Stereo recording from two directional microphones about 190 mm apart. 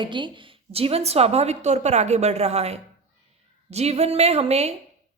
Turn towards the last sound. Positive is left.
turn(degrees=-35)  # may be behind; listen again after turning